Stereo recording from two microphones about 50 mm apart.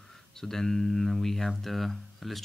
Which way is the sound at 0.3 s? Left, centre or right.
Centre.